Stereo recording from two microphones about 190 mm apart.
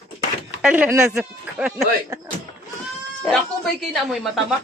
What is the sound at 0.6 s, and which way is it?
Speech, 5° right (ahead or behind).